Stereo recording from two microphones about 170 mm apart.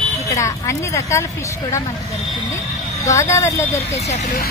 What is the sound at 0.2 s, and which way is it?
Speech, 20° left (ahead or behind).